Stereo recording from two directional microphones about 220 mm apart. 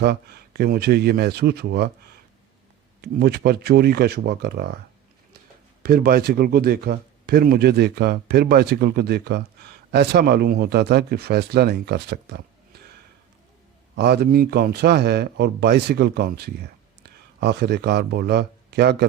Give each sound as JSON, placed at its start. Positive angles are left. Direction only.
{"t": 0.0, "sound": "a man's voice", "side_deg": -50}
{"t": 5.8, "sound": "a man's voice", "side_deg": -45}
{"t": 13.9, "sound": "a man's voice", "side_deg": -50}